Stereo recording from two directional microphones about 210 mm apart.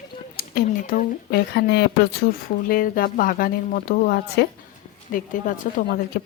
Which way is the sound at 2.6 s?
40° left (ahead or behind).